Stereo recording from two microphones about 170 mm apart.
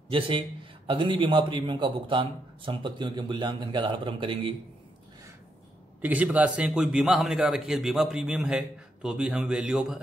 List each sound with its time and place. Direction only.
0.8 s a man's voice: 30° right (ahead or behind)
5.9 s a man's voice: 10° right (ahead or behind)